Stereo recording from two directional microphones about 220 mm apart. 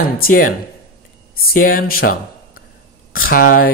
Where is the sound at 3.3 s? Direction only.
40° left (ahead or behind).